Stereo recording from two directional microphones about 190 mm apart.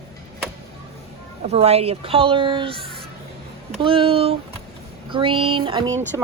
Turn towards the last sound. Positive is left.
turn(degrees=-25)  # may be behind; listen again after turning